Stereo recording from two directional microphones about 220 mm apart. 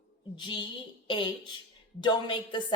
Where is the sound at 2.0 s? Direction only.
20° left (ahead or behind).